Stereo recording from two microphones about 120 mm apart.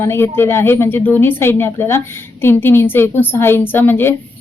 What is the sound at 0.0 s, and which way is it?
Speech, 20° left (ahead or behind).